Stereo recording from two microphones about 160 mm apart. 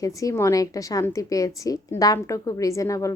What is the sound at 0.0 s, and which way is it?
A woman's voice, 20° left (ahead or behind).